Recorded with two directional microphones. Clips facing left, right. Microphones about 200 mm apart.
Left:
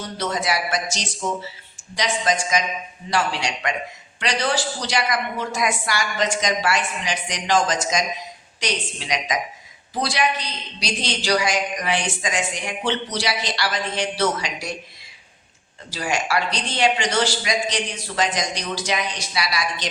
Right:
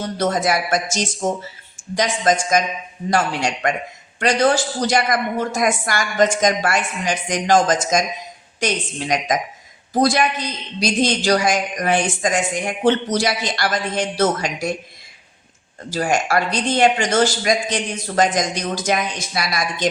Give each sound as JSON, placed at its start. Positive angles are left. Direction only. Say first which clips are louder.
{"t": 0.0, "sound": "a man's voice", "louder": "right 6 dB", "side_deg": -50}
{"t": 15.9, "sound": "a man's voice", "louder": "right 5 dB", "side_deg": -50}